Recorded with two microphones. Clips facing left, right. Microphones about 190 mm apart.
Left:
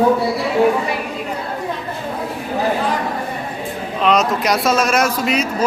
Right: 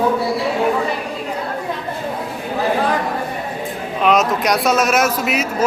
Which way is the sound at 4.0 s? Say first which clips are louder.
Right 1 dB; centre (ahead or behind).